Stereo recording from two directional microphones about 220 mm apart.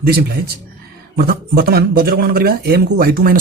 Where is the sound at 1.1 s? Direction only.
45° right (ahead or behind).